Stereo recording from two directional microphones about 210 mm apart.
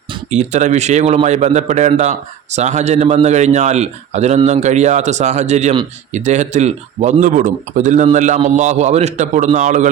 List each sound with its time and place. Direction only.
0.1 s a man's voice: 35° right (ahead or behind)